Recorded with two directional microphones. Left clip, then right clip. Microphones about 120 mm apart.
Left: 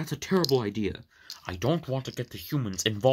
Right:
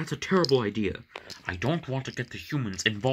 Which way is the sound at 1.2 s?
65° left (ahead or behind).